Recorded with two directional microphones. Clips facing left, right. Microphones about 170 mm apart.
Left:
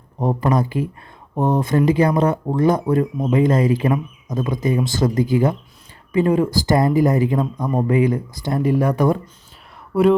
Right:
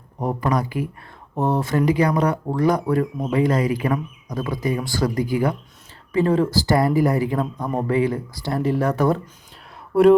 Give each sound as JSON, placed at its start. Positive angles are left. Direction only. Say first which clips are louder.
{"t": 0.2, "sound": "speech", "louder": "left 3 dB", "side_deg": 25}
{"t": 9.9, "sound": "speech", "louder": "right 2 dB", "side_deg": 0}